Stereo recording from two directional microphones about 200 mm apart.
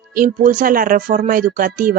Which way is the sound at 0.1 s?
45° right (ahead or behind).